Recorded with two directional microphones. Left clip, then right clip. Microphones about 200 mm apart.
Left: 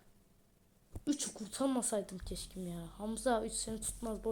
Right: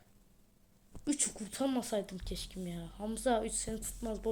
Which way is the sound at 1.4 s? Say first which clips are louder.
Right 1 dB; 5° left (ahead or behind).